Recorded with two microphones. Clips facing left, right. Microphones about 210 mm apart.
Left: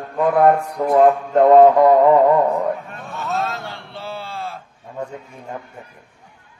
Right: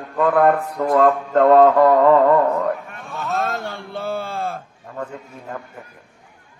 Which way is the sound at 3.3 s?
50° right (ahead or behind).